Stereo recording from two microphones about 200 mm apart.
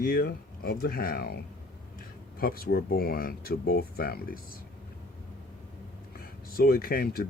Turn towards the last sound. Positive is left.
turn(degrees=50)  # may be behind; listen again after turning